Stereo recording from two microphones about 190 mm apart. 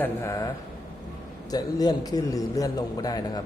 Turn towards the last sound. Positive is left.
turn(degrees=20)  # may be behind; listen again after turning